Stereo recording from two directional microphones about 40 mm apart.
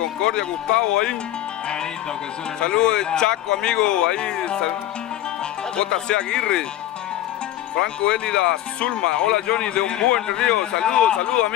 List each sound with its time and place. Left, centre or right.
0.2 s a man's voice: centre
2.6 s a man's voice: left
5.8 s a man's voice: centre
7.8 s a man's voice: centre